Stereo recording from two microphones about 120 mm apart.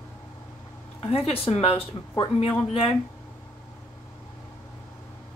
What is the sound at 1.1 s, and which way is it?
A woman's voice, 55° left (ahead or behind).